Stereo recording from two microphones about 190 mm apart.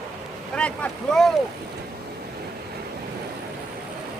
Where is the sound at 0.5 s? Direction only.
5° left (ahead or behind).